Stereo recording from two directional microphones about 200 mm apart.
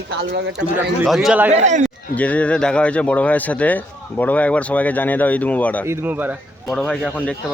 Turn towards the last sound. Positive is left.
turn(degrees=-10)  # may be behind; listen again after turning